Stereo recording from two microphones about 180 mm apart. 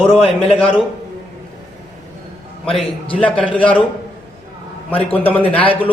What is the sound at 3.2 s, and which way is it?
Speech, 5° left (ahead or behind).